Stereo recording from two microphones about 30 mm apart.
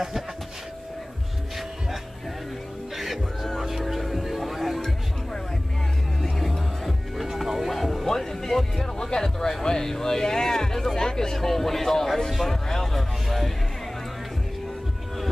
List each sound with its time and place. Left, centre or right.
3.5 s a sound: centre
3.8 s music: centre
6.2 s music: centre
7.4 s music: centre
7.7 s music: centre
8.9 s speech: centre
11.3 s speech: centre
12.6 s vehicle: centre